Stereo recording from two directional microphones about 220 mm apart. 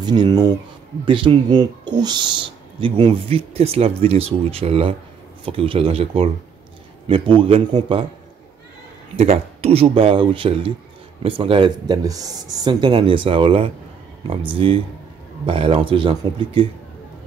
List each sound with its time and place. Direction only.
0.0 s speech: 20° right (ahead or behind)
9.1 s speech: 30° right (ahead or behind)